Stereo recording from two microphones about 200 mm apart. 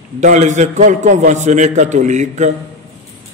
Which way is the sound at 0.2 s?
35° right (ahead or behind).